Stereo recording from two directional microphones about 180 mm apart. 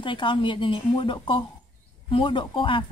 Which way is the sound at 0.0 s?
25° left (ahead or behind).